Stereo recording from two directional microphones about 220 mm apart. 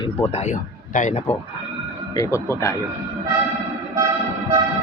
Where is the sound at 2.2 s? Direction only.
15° left (ahead or behind).